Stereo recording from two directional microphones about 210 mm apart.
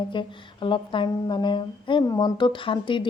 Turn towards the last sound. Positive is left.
turn(degrees=25)  # may be behind; listen again after turning